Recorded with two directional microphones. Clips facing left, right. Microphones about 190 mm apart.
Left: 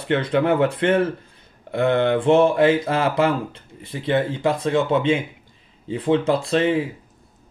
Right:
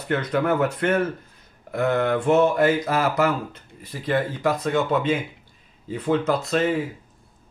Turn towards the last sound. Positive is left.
turn(degrees=30)  # may be behind; listen again after turning